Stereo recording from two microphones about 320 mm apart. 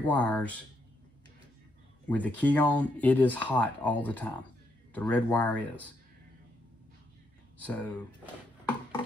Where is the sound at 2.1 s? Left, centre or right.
Centre.